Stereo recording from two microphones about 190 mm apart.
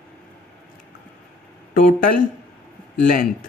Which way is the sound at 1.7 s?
45° left (ahead or behind).